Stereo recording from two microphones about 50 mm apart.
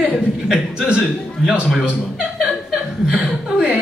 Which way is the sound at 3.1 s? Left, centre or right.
Right.